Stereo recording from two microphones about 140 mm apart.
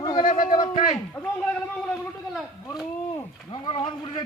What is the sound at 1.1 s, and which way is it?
A man's voice, 10° left (ahead or behind).